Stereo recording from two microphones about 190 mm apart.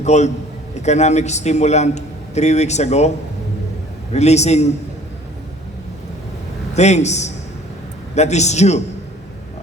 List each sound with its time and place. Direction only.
0.0 s a man's voice: 35° left (ahead or behind)
4.1 s a man's voice: 35° left (ahead or behind)
6.7 s a man's voice: 35° left (ahead or behind)